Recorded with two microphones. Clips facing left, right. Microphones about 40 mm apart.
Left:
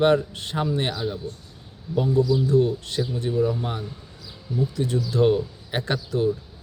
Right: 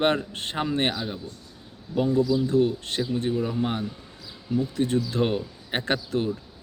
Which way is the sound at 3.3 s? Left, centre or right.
Centre.